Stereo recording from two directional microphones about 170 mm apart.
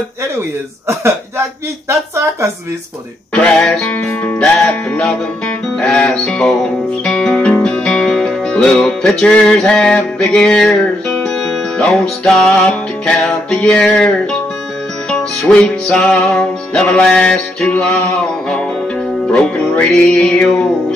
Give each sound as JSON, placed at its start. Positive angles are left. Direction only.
{"t": 1.9, "sound": "speech", "side_deg": -15}
{"t": 3.3, "sound": "music", "side_deg": 5}